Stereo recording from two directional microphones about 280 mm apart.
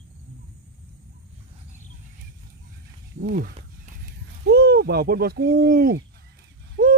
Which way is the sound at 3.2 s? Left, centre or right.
Right.